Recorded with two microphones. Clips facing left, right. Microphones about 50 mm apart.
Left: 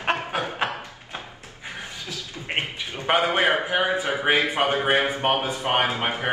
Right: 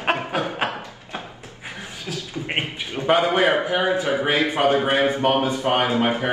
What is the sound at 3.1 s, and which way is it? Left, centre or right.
A man's voice, left.